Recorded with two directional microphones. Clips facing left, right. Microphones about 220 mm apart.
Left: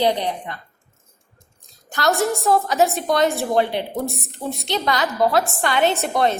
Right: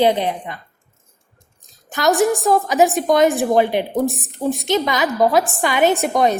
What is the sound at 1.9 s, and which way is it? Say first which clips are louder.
A woman's voice: right 4 dB; 20° right (ahead or behind).